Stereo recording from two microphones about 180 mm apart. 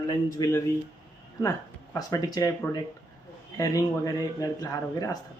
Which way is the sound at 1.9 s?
20° left (ahead or behind).